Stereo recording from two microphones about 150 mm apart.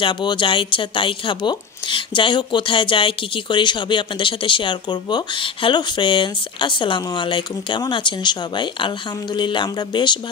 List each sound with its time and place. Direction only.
0.0 s speech: 30° left (ahead or behind)